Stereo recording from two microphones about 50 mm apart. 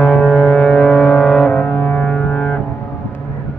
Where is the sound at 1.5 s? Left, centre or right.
Left.